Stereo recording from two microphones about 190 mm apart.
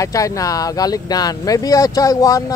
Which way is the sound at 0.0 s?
15° left (ahead or behind).